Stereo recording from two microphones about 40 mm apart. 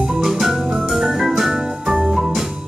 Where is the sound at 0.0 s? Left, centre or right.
Centre.